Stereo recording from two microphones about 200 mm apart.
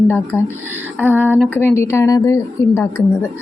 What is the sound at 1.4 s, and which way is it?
Speech, 10° left (ahead or behind).